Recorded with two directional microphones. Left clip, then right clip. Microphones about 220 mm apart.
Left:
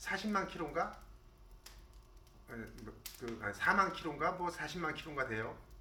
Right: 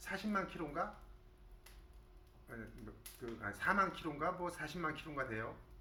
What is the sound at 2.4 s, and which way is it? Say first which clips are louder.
Speech: left 3 dB; 10° right (ahead or behind).